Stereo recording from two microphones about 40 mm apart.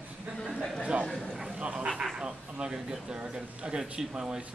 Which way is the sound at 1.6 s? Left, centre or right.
Right.